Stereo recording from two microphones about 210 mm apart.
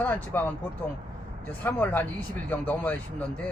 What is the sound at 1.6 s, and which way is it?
Speech, 10° left (ahead or behind).